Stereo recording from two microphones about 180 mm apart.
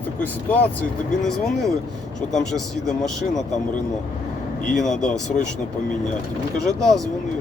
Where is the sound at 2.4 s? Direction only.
Centre (ahead or behind).